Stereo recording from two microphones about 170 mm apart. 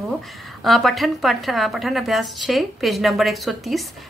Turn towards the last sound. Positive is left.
turn(degrees=0)  # may be behind; listen again after turning